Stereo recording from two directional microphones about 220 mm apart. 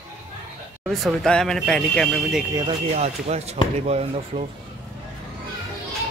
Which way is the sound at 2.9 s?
30° right (ahead or behind).